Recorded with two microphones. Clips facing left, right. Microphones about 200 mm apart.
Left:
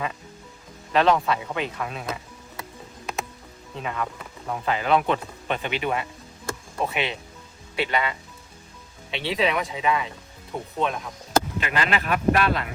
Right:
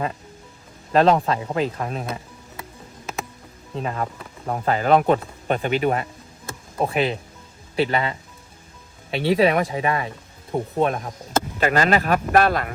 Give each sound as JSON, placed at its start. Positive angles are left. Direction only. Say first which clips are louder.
{"t": 0.9, "sound": "speech", "louder": "right 3 dB", "side_deg": -35}
{"t": 3.8, "sound": "speech", "louder": "right 3 dB", "side_deg": -35}